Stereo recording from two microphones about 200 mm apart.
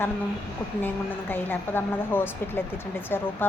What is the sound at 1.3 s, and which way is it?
A woman's voice, 10° left (ahead or behind).